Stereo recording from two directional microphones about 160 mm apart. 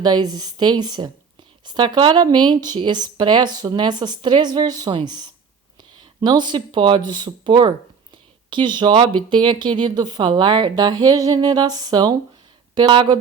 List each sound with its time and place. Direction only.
0.0 s speech: 25° right (ahead or behind)